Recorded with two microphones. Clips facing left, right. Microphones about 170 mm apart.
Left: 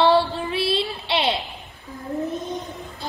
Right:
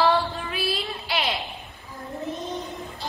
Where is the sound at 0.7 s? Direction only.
30° left (ahead or behind).